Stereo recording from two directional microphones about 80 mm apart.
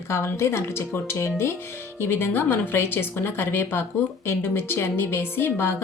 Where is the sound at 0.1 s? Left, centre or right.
Left.